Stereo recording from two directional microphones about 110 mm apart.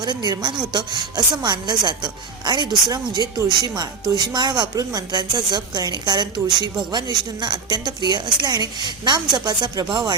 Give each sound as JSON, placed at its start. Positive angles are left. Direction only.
{"t": 0.0, "sound": "a woman's voice", "side_deg": -40}